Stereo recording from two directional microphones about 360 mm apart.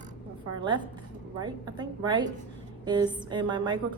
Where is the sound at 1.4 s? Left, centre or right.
Centre.